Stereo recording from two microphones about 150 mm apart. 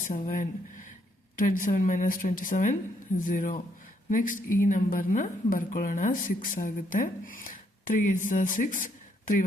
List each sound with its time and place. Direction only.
0.1 s a woman's voice: 60° left (ahead or behind)